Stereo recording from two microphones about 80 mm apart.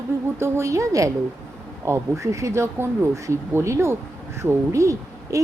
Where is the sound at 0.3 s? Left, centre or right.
Right.